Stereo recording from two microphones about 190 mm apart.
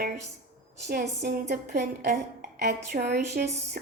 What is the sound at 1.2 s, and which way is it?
A woman's voice, 60° right (ahead or behind).